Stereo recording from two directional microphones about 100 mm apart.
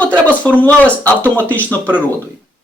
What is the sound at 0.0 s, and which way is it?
Speech, 15° left (ahead or behind).